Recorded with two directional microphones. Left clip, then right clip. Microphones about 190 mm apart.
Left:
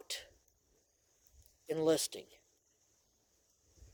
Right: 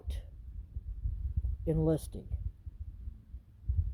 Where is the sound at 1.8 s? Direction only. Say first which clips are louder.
Left 3 dB; 10° left (ahead or behind).